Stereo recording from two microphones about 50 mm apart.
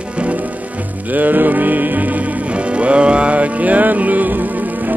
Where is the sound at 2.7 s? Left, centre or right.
Right.